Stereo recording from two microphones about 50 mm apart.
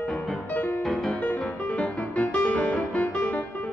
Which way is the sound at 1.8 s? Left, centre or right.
Left.